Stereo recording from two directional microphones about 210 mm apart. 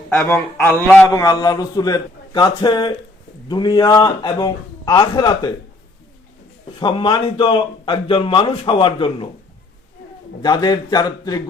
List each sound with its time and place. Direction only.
0.1 s a man's voice: 10° left (ahead or behind)
6.7 s a man's voice: 20° left (ahead or behind)
10.4 s a man's voice: 20° left (ahead or behind)